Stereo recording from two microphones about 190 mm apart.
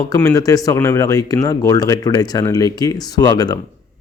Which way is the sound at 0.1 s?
15° left (ahead or behind).